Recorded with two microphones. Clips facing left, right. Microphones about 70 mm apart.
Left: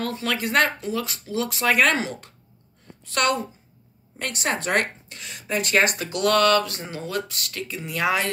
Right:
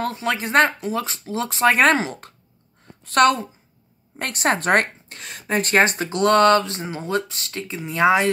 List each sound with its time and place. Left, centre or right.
0.0 s a woman's voice: right